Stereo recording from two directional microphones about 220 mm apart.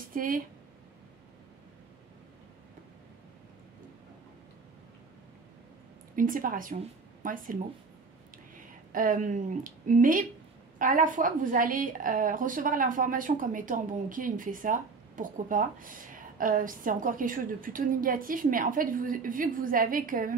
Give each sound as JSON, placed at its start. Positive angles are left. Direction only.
{"t": 0.1, "sound": "speech", "side_deg": -40}
{"t": 6.1, "sound": "a woman's voice", "side_deg": -40}
{"t": 8.9, "sound": "a woman's voice", "side_deg": -35}